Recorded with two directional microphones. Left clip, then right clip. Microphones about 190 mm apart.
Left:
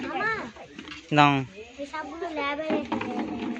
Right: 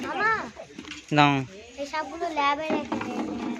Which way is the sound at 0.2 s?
30° right (ahead or behind).